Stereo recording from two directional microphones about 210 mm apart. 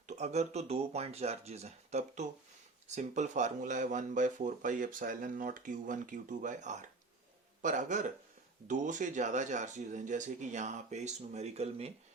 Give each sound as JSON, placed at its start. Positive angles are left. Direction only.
{"t": 0.1, "sound": "speech", "side_deg": -30}